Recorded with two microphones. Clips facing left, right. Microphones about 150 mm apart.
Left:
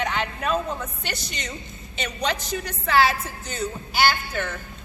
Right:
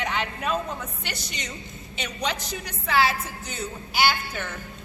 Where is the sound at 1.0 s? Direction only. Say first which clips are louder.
Left 3 dB; 10° right (ahead or behind).